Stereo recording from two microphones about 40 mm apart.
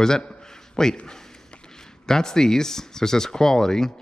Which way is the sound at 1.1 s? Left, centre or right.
Centre.